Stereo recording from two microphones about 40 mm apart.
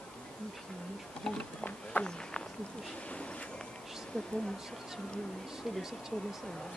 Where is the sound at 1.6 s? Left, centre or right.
Left.